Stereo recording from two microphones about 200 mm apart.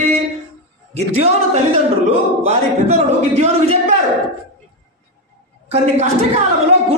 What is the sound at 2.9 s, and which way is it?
A woman's voice, 35° right (ahead or behind).